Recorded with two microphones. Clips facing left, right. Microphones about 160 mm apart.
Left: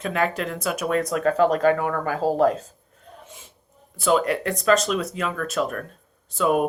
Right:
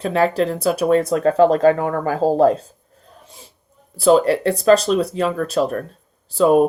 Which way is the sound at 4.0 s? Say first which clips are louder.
Right 7 dB; 35° right (ahead or behind).